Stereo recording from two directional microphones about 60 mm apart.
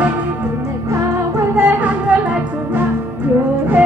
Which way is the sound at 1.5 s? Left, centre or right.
Right.